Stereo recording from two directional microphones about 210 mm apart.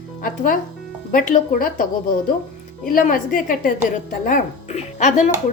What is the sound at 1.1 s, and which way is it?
Speech, 40° left (ahead or behind).